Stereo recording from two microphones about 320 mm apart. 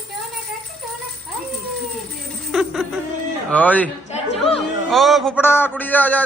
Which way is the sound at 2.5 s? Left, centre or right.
Centre.